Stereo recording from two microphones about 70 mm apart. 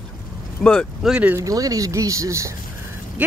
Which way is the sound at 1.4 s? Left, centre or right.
Right.